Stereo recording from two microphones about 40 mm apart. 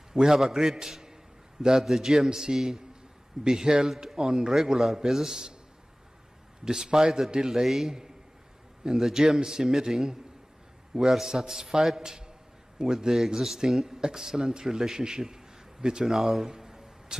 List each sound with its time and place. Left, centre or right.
0.1 s a man's voice: centre
0.4 s a man's voice: centre
6.6 s a man's voice: centre
7.6 s a man's voice: centre